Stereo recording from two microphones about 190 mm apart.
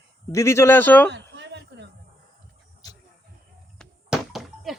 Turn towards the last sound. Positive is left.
turn(degrees=0)  # may be behind; listen again after turning